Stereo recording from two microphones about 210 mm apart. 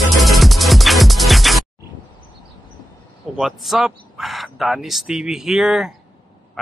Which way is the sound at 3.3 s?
Centre (ahead or behind).